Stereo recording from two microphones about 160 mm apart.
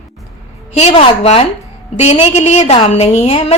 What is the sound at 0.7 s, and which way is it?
A woman's voice, 40° left (ahead or behind).